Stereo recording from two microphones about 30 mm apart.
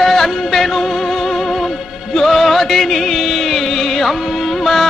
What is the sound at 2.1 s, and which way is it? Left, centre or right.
Music, centre.